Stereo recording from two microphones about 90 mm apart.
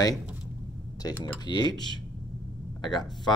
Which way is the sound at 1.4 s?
50° left (ahead or behind).